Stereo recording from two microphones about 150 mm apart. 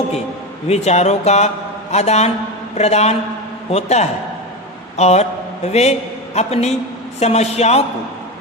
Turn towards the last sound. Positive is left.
turn(degrees=45)  # may be behind; listen again after turning